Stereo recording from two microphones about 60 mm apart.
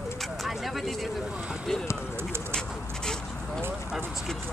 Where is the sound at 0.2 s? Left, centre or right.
Centre.